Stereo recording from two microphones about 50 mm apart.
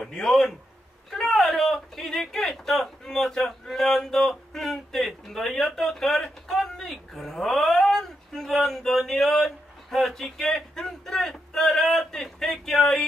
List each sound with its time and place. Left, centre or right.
0.0 s a man's voice: centre